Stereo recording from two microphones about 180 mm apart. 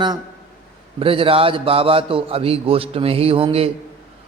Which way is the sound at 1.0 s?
30° right (ahead or behind).